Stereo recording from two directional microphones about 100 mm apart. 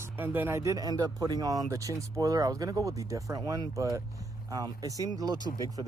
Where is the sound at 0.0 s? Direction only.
20° right (ahead or behind).